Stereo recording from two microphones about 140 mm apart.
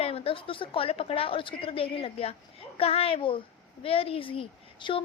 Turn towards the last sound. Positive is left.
turn(degrees=40)  # may be behind; listen again after turning